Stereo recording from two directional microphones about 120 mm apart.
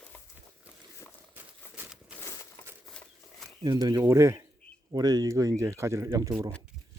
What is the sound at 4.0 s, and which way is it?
Speech, 20° right (ahead or behind).